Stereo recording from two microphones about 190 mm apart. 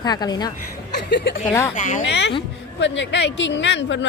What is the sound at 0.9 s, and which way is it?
A woman's voice, 65° left (ahead or behind).